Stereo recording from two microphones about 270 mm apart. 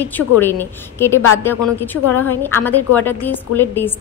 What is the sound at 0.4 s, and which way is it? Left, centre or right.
A woman's voice, centre.